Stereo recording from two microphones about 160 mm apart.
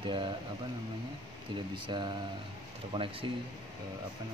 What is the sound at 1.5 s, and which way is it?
Speech, 30° right (ahead or behind).